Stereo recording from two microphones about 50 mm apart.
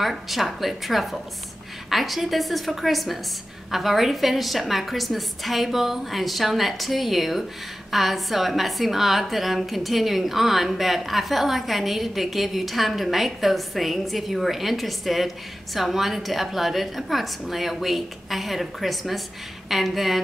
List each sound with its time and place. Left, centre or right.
0.0 s a woman's voice: centre